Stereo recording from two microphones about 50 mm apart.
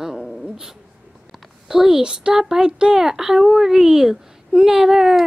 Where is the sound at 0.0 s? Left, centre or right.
Centre.